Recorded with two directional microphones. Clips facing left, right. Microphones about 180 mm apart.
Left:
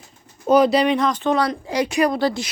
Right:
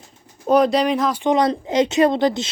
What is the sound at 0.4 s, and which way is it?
Speech, centre (ahead or behind).